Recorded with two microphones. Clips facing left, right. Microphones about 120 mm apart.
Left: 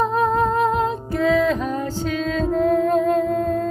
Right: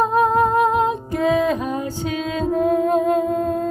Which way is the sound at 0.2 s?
15° right (ahead or behind).